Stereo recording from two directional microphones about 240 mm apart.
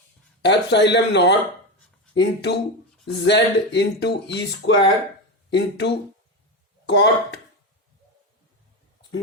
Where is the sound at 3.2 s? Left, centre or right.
Left.